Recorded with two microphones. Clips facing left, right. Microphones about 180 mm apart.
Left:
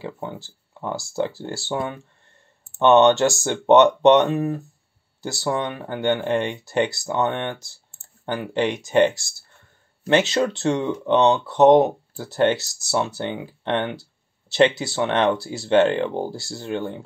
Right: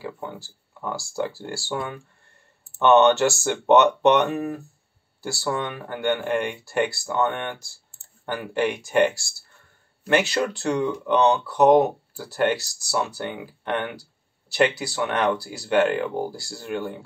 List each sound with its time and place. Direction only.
0.0 s speech: 25° left (ahead or behind)